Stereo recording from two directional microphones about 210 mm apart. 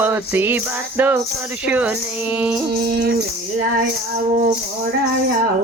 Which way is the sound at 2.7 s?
50° right (ahead or behind).